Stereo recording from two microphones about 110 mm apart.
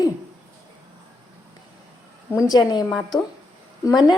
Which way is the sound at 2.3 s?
25° left (ahead or behind).